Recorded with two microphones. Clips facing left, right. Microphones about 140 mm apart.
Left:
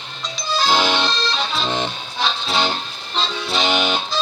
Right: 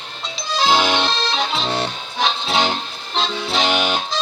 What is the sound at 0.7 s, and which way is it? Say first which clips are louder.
Accordion: right 1 dB; 10° right (ahead or behind).